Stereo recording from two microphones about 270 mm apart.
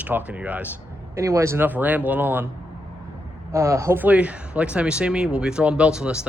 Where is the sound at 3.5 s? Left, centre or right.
Centre.